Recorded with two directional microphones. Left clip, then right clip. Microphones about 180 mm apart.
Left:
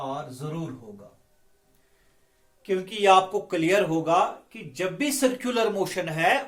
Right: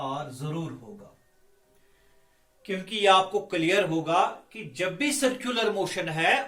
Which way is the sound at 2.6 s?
40° left (ahead or behind).